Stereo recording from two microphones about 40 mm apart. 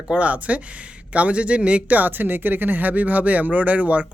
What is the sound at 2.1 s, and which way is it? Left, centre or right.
Speech, right.